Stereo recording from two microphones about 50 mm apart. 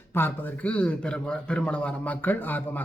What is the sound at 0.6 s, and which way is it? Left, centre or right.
Speech, left.